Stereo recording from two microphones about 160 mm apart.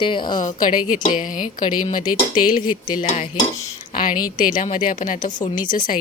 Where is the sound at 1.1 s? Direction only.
55° left (ahead or behind).